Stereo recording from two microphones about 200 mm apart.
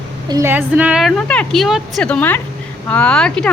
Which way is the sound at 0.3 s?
15° right (ahead or behind).